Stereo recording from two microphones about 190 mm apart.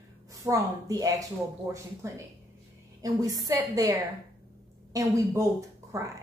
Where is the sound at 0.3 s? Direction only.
15° right (ahead or behind).